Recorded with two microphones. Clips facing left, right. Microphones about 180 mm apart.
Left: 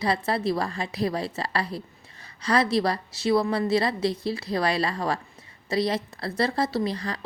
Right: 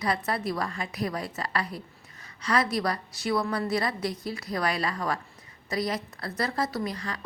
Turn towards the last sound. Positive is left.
turn(degrees=35)  # may be behind; listen again after turning